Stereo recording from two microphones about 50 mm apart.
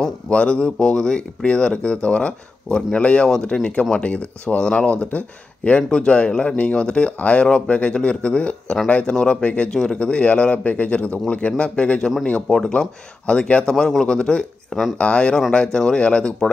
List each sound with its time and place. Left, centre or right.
0.0 s speech: left
9.7 s speech: centre
9.9 s speech: left
12.4 s speech: centre
13.3 s speech: left